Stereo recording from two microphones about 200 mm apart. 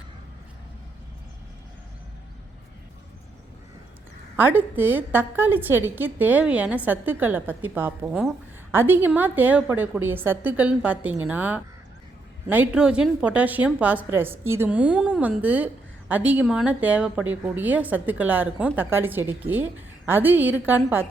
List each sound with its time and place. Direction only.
4.4 s a woman's voice: 10° right (ahead or behind)